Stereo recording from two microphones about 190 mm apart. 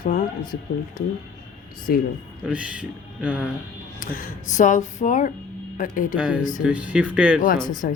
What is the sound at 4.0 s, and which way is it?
Speech, 45° left (ahead or behind).